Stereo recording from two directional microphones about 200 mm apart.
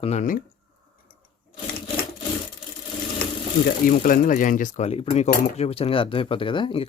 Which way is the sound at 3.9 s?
45° left (ahead or behind).